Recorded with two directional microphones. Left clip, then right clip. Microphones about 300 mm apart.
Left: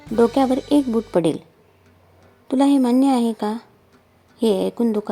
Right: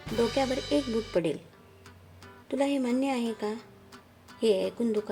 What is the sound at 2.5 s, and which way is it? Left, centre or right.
A woman's voice, left.